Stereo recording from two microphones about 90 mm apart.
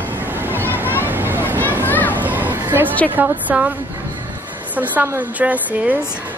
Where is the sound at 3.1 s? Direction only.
20° right (ahead or behind).